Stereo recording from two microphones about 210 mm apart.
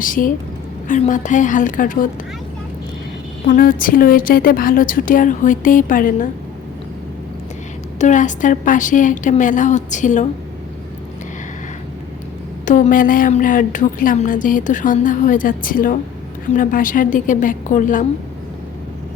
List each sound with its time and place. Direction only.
0.0 s a woman's voice: 40° left (ahead or behind)
3.4 s a woman's voice: 40° left (ahead or behind)
7.9 s a woman's voice: 35° left (ahead or behind)
12.6 s a woman's voice: 40° left (ahead or behind)